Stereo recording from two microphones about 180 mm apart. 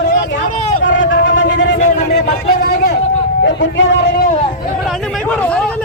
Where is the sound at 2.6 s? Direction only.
60° left (ahead or behind).